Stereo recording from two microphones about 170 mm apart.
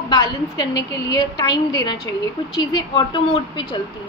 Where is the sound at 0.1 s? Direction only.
25° left (ahead or behind).